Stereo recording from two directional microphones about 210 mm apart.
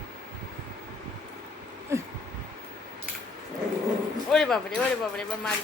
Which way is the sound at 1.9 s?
15° right (ahead or behind).